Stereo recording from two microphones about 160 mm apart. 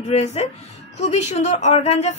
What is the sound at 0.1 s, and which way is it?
A woman's voice, 45° left (ahead or behind).